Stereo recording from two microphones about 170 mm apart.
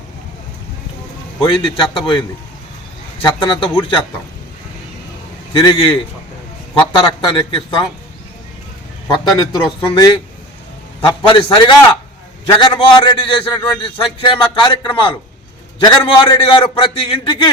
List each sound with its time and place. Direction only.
1.4 s a man's voice: 30° left (ahead or behind)
5.5 s a man's voice: 30° left (ahead or behind)
9.6 s a man's voice: 30° left (ahead or behind)